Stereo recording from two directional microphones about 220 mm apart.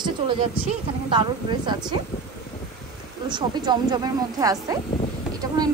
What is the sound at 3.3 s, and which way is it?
Speech, 20° right (ahead or behind).